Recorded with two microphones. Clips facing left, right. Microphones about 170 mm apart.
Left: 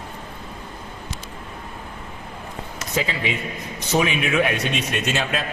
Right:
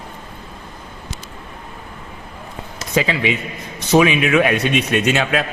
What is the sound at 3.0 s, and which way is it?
Speech, 90° right.